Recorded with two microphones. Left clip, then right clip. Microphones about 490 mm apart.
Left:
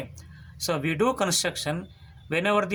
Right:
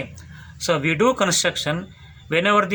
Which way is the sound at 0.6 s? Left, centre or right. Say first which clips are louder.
Right 6 dB; left.